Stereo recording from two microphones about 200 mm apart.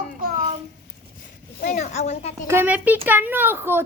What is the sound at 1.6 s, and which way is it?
Speech, 40° left (ahead or behind).